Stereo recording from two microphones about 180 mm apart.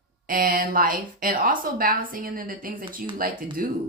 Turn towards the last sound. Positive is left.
turn(degrees=-50)  # may be behind; listen again after turning